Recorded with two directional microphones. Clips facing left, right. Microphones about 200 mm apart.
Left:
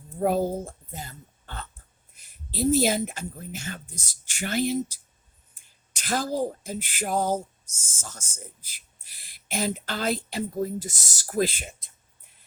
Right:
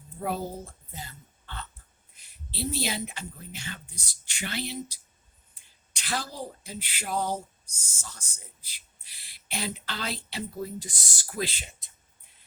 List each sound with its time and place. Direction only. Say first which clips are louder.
0.2 s a woman's voice: left 8 dB; 45° left (ahead or behind)